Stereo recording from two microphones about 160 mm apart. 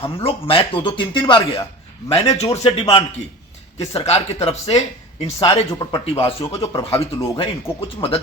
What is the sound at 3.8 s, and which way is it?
Speech, 40° left (ahead or behind).